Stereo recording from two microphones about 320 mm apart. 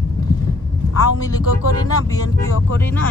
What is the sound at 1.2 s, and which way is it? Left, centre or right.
Speech, centre.